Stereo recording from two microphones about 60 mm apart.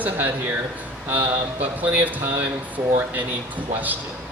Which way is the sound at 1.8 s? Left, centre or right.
Right.